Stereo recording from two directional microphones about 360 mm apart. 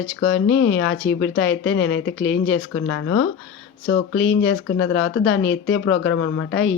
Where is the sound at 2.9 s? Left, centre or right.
Left.